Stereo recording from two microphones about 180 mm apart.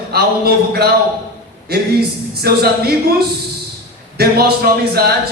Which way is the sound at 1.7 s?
60° right (ahead or behind).